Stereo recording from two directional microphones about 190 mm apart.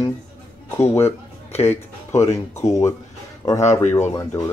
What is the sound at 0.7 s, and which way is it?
Speech, 10° left (ahead or behind).